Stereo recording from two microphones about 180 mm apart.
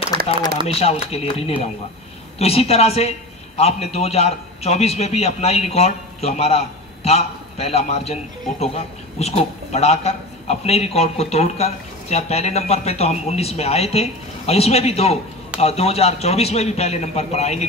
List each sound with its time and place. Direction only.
0.7 s a man's voice: 35° left (ahead or behind)